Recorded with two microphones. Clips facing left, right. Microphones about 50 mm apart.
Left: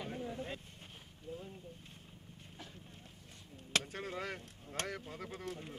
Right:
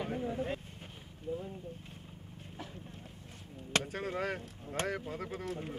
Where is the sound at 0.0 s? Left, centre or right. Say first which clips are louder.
Right 6 dB; centre.